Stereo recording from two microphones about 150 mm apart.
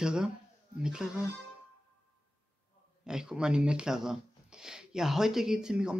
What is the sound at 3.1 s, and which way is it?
Speech, 5° right (ahead or behind).